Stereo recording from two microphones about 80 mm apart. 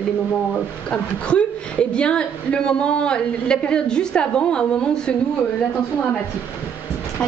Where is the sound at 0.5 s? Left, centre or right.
Centre.